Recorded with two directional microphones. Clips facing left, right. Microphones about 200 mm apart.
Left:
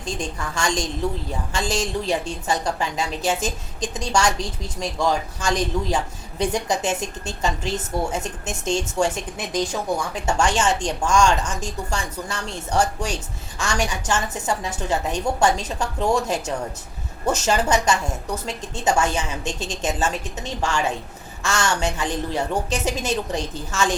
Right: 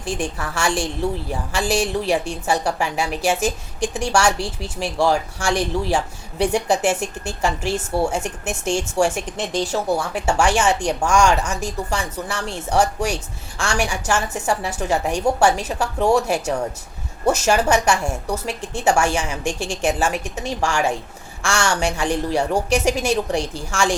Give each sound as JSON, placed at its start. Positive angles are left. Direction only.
{"t": 0.0, "sound": "a woman's voice", "side_deg": -10}
{"t": 10.2, "sound": "a woman's voice", "side_deg": -10}